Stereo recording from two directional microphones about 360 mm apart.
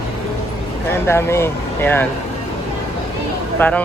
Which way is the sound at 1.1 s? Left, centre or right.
Centre.